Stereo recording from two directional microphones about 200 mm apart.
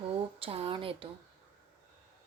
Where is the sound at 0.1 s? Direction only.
30° right (ahead or behind).